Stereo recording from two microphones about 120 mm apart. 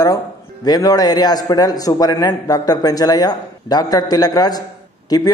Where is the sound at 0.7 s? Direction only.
35° left (ahead or behind).